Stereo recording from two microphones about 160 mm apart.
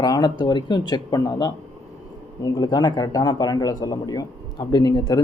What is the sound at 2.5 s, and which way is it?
Speech, 25° left (ahead or behind).